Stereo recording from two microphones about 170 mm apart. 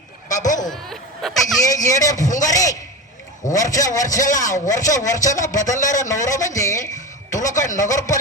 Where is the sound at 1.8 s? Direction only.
20° left (ahead or behind).